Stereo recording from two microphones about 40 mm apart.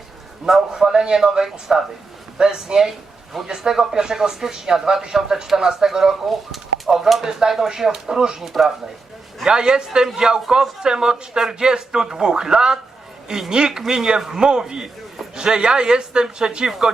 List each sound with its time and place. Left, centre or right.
0.4 s a man's voice: centre
6.2 s speech: centre
9.4 s a man's voice: centre